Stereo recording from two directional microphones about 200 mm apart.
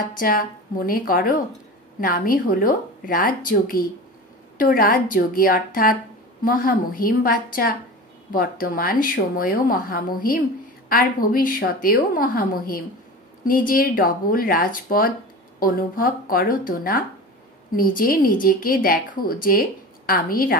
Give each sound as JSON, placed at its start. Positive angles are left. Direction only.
{"t": 0.2, "sound": "a woman's voice", "side_deg": 45}